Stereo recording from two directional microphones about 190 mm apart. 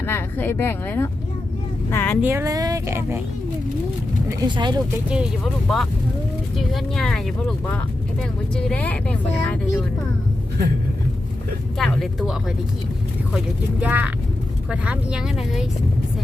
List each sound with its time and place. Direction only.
0.0 s speech: 10° left (ahead or behind)
2.2 s speech: 15° right (ahead or behind)
4.3 s speech: 25° right (ahead or behind)
5.0 s speech: 5° right (ahead or behind)
8.5 s speech: 5° left (ahead or behind)
11.8 s speech: centre (ahead or behind)
13.8 s speech: 5° right (ahead or behind)